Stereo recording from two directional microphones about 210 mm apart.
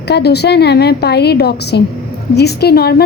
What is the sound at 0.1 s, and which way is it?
A woman's voice, 50° left (ahead or behind).